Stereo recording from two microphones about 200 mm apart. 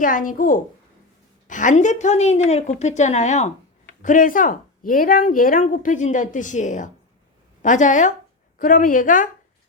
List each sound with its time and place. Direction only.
0.0 s a woman's voice: 40° left (ahead or behind)